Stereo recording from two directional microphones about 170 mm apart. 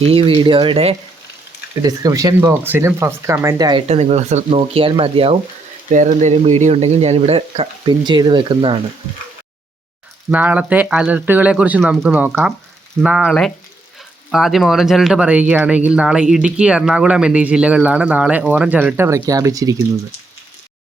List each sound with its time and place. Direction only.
0.0 s speech: 35° right (ahead or behind)
1.8 s speech: 20° right (ahead or behind)
3.8 s speech: 40° right (ahead or behind)
5.9 s speech: 45° right (ahead or behind); by 8.8 s 30° right (ahead or behind)
10.3 s speech: 10° right (ahead or behind)